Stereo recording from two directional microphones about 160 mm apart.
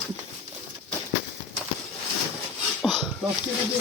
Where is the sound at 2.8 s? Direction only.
Centre (ahead or behind).